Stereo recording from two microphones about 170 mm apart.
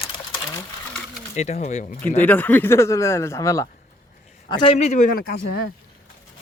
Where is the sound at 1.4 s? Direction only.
40° left (ahead or behind).